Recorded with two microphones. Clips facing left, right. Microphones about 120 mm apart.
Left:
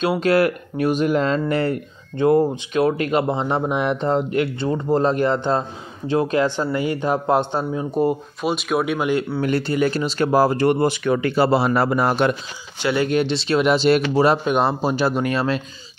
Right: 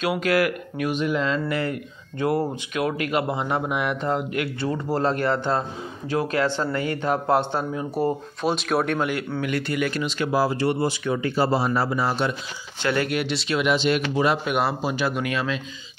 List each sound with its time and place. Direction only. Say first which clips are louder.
0.0 s speech: left 4 dB; 30° left (ahead or behind)
8.1 s speech: left 2 dB; centre (ahead or behind)
9.4 s speech: left 3 dB; 30° left (ahead or behind); by 12.4 s 55° left (ahead or behind)
12.8 s speech: left 4 dB; 20° left (ahead or behind); by 15.6 s 40° left (ahead or behind)